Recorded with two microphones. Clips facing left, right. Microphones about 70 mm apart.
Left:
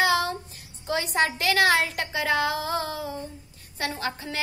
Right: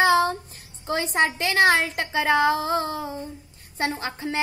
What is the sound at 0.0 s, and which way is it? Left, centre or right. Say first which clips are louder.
Child singing: right 4 dB; right.